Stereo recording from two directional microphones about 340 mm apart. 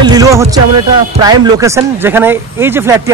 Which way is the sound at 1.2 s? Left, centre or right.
Centre.